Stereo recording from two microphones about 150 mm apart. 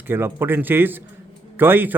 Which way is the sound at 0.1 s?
15° right (ahead or behind).